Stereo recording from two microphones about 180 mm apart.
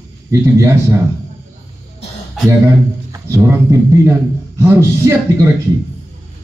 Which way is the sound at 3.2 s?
15° right (ahead or behind).